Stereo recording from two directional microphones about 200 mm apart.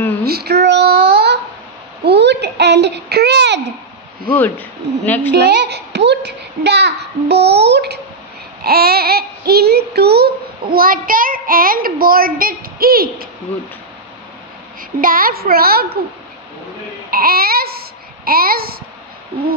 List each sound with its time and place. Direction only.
0.2 s child singing: 50° right (ahead or behind)
2.0 s babbling: 55° right (ahead or behind)
4.3 s speech: 10° left (ahead or behind)
5.3 s a child's voice: 55° right (ahead or behind)
14.8 s a woman's voice: 45° right (ahead or behind)
17.1 s speech: 50° right (ahead or behind)